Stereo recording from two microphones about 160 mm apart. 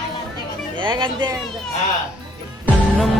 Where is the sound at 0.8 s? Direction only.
30° right (ahead or behind).